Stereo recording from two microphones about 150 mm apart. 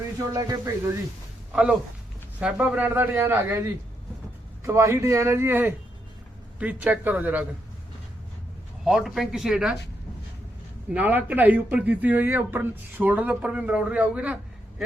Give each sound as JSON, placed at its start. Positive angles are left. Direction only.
{"t": 0.3, "sound": "speech", "side_deg": -25}
{"t": 2.4, "sound": "speech", "side_deg": -10}
{"t": 8.8, "sound": "speech", "side_deg": -5}
{"t": 10.9, "sound": "speech", "side_deg": -10}